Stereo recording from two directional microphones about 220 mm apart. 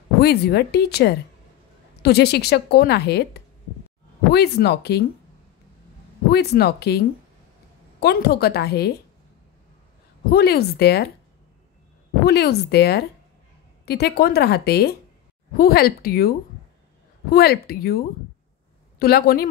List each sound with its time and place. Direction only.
0.2 s a woman's voice: 45° left (ahead or behind)
6.3 s a woman's voice: 45° left (ahead or behind)
10.3 s a woman's voice: 45° left (ahead or behind)
12.3 s a woman's voice: 50° left (ahead or behind)